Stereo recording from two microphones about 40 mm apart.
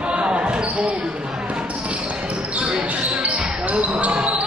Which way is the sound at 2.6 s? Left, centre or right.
Right.